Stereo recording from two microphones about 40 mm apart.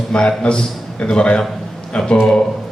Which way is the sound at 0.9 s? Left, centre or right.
Left.